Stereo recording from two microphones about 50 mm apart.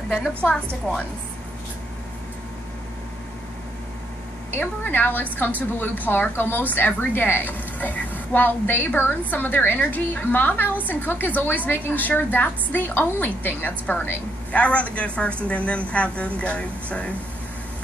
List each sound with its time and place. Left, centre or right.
4.5 s a woman's voice: left